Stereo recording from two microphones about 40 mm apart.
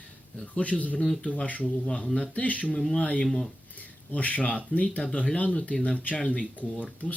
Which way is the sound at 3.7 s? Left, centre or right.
Left.